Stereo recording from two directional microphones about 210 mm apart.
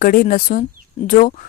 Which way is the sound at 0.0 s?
40° left (ahead or behind).